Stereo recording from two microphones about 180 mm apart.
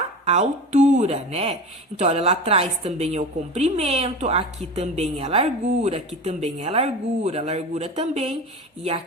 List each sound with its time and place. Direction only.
0.3 s a woman's voice: 40° right (ahead or behind)